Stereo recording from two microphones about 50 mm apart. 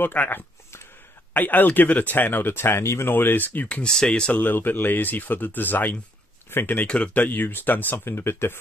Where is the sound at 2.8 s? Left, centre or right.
Left.